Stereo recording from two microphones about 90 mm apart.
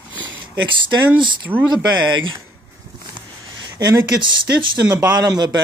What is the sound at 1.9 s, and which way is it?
Speech, 55° right (ahead or behind).